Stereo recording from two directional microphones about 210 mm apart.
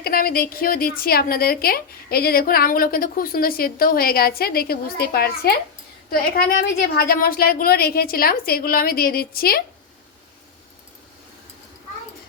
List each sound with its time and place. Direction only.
0.0 s a woman's voice: 45° left (ahead or behind)